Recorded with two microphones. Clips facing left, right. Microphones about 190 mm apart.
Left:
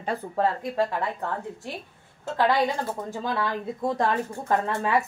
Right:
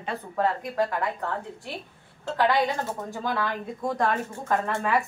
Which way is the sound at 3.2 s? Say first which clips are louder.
Even; 25° left (ahead or behind).